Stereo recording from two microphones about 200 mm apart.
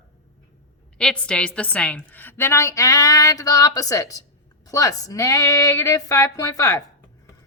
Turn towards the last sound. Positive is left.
turn(degrees=15)  # may be behind; listen again after turning